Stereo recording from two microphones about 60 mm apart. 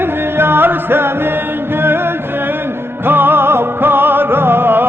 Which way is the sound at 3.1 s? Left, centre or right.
Right.